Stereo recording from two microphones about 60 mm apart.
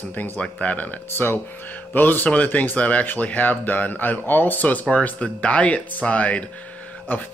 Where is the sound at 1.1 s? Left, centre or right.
Left.